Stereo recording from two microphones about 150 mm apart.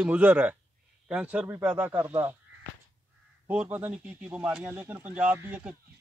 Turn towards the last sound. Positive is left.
turn(degrees=-10)  # may be behind; listen again after turning